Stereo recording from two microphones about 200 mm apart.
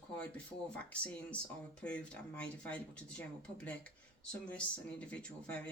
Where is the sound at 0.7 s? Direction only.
5° left (ahead or behind).